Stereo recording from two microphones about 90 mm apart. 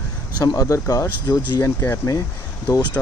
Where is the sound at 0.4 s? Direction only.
40° left (ahead or behind).